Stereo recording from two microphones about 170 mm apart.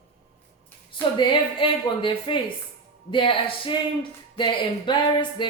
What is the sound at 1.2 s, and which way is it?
Speech, 30° left (ahead or behind).